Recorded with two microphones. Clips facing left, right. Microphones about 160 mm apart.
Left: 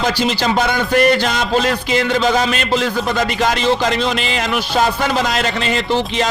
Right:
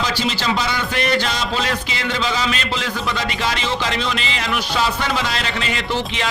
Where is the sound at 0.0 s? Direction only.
55° left (ahead or behind).